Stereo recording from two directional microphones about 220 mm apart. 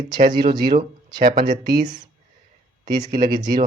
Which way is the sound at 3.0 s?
35° right (ahead or behind).